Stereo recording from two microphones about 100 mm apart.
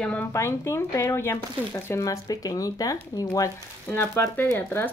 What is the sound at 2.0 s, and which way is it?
Speech, 35° left (ahead or behind).